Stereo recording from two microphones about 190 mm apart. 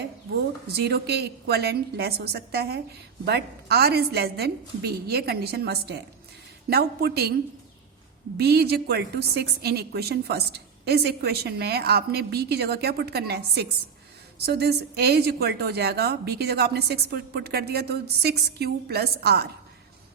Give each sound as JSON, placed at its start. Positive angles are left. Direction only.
{"t": 0.7, "sound": "a woman's voice", "side_deg": -60}
{"t": 8.4, "sound": "a woman's voice", "side_deg": -60}